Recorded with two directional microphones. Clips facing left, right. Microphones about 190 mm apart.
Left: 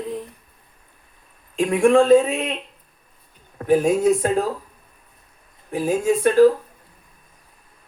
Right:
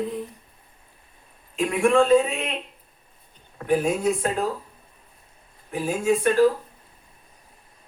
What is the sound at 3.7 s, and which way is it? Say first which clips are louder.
Speech: left 5 dB; 40° left (ahead or behind).